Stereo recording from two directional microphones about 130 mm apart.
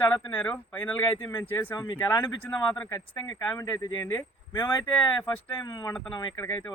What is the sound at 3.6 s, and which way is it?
Speech, 25° left (ahead or behind).